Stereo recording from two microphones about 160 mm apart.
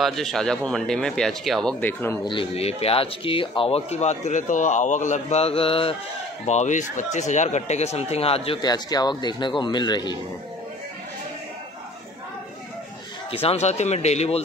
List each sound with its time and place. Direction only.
0.0 s speech: centre (ahead or behind)
2.2 s speech: 35° left (ahead or behind)
6.4 s speech: 45° left (ahead or behind); by 10.1 s 25° left (ahead or behind)
13.3 s speech: 40° left (ahead or behind)